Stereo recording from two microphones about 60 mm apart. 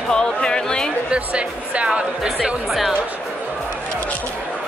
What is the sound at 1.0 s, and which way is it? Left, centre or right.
Speech, centre.